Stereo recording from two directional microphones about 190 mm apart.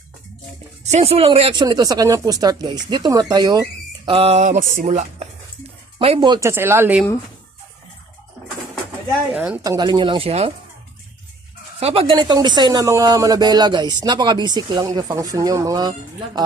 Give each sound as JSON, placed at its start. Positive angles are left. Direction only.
{"t": 0.9, "sound": "speech", "side_deg": -35}
{"t": 6.5, "sound": "speech", "side_deg": -15}
{"t": 9.3, "sound": "speech", "side_deg": -5}
{"t": 9.6, "sound": "speech", "side_deg": -20}
{"t": 11.8, "sound": "speech", "side_deg": -30}